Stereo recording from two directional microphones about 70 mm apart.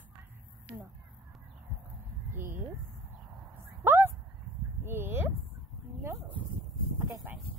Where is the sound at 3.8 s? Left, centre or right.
Right.